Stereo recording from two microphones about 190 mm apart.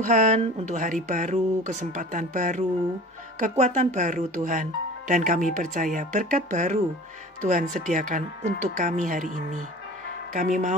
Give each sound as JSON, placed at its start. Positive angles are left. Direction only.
{"t": 0.0, "sound": "speech", "side_deg": -40}